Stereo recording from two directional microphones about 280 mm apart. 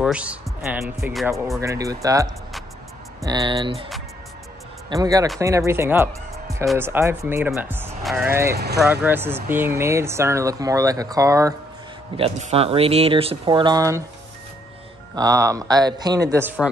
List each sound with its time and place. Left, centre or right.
0.0 s speech: centre
3.3 s speech: centre
4.8 s speech: centre
12.2 s speech: right
15.1 s speech: centre